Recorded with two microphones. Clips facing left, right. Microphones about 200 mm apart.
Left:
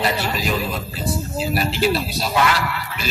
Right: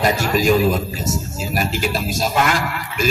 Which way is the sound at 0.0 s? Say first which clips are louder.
Right 5 dB; 45° right (ahead or behind).